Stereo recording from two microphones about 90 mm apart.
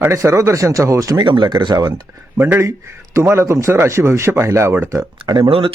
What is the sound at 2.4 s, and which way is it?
Speech, 25° right (ahead or behind).